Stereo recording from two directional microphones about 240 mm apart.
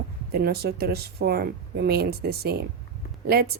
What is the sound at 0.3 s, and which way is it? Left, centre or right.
Speech, right.